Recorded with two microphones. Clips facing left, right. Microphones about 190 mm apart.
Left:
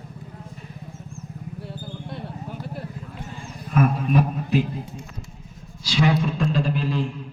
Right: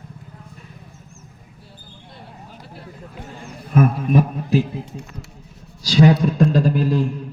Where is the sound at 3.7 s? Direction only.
45° right (ahead or behind).